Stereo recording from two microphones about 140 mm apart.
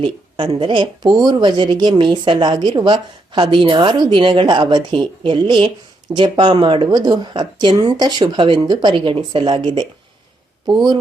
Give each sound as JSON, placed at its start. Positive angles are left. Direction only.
{"t": 0.0, "sound": "speech", "side_deg": -35}